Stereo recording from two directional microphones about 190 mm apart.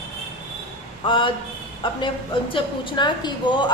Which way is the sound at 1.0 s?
25° left (ahead or behind).